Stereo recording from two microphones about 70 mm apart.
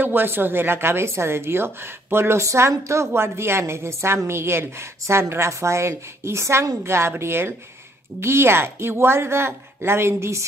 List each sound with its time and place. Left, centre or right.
0.0 s a woman's voice: right